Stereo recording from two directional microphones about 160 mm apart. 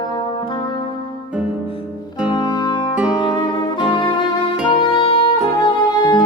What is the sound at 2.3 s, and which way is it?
Music, 25° left (ahead or behind).